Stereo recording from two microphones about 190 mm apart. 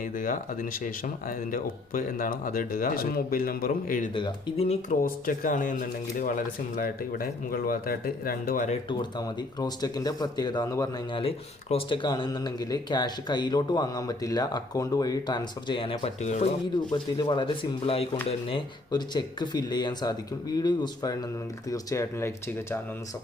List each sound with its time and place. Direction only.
0.0 s speech: 45° left (ahead or behind)
4.1 s speech: 30° left (ahead or behind)
5.0 s speech: 45° left (ahead or behind)
8.9 s speech: 25° left (ahead or behind)
16.9 s speech: 25° left (ahead or behind)